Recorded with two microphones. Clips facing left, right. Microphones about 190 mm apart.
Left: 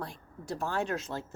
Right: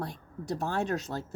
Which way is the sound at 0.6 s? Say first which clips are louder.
Right 1 dB; 40° right (ahead or behind).